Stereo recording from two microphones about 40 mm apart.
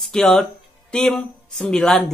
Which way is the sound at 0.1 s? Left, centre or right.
Centre.